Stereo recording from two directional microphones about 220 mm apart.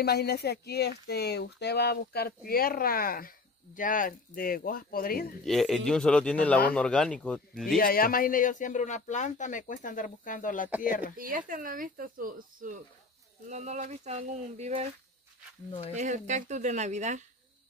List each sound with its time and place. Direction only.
0.0 s speech: 45° left (ahead or behind)
5.4 s speech: centre (ahead or behind)
7.6 s speech: 40° left (ahead or behind)
11.1 s speech: 40° right (ahead or behind)
16.0 s speech: 35° right (ahead or behind)